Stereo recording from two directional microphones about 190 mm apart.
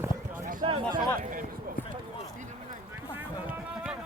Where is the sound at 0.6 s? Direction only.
30° right (ahead or behind).